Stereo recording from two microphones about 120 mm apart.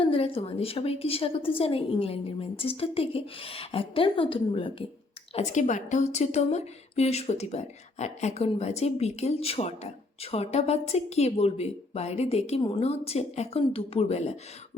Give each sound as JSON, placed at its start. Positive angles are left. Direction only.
{"t": 0.0, "sound": "a woman's voice", "side_deg": 50}
{"t": 5.3, "sound": "a woman's voice", "side_deg": 75}